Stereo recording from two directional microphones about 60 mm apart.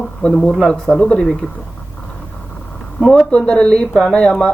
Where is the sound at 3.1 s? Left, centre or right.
Centre.